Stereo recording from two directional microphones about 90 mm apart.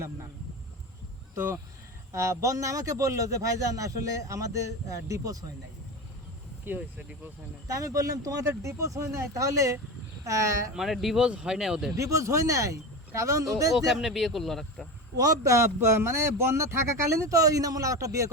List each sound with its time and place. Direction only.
2.1 s speech: 35° right (ahead or behind)
6.7 s speech: 20° right (ahead or behind)
7.7 s speech: 35° right (ahead or behind)
10.8 s speech: centre (ahead or behind)
11.9 s speech: 35° right (ahead or behind)
13.7 s speech: 5° right (ahead or behind)
15.1 s speech: 40° right (ahead or behind)